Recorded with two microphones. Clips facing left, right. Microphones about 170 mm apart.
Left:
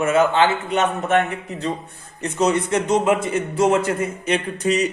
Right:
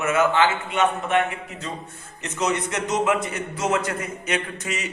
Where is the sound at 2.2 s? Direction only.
30° left (ahead or behind).